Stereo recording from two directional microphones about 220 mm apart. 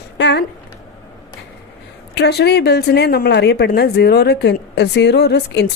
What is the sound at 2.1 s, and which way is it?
Speech, 50° left (ahead or behind).